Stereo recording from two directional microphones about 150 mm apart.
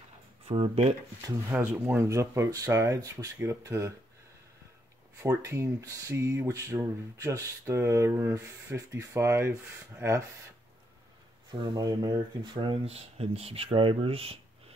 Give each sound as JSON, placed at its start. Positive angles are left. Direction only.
{"t": 0.5, "sound": "speech", "side_deg": -40}
{"t": 1.2, "sound": "speech", "side_deg": -20}
{"t": 5.2, "sound": "speech", "side_deg": -20}
{"t": 11.7, "sound": "speech", "side_deg": -25}